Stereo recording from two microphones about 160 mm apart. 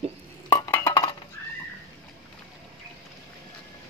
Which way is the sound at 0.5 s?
15° left (ahead or behind).